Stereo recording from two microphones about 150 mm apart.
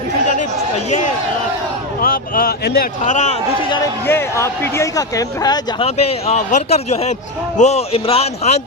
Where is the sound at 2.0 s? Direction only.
75° left (ahead or behind).